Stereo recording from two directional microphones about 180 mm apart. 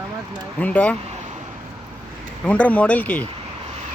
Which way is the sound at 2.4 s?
5° left (ahead or behind).